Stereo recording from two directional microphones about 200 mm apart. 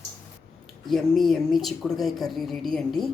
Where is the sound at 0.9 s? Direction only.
Centre (ahead or behind).